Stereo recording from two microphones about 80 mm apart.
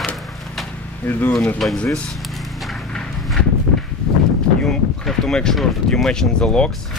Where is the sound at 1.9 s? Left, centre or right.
Centre.